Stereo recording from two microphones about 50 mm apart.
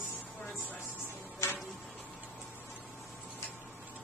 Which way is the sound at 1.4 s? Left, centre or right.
Left.